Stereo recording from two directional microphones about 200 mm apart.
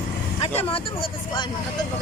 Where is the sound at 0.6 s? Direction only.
25° left (ahead or behind).